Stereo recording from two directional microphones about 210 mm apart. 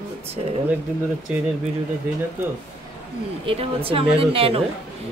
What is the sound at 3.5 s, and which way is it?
Speech, 25° right (ahead or behind).